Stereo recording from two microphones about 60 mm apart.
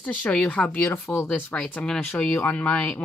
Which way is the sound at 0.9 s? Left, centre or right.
Left.